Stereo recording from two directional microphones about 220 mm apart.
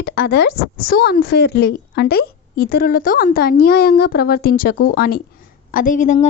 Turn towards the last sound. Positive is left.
turn(degrees=35)  # may be behind; listen again after turning